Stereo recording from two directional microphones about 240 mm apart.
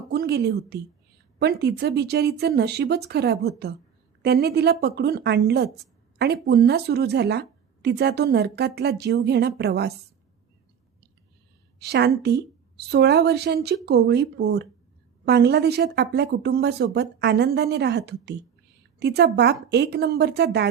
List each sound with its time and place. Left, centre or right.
0.1 s a woman's voice: right
11.8 s a woman's voice: right